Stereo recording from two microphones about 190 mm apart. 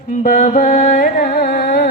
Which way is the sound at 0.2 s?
40° left (ahead or behind).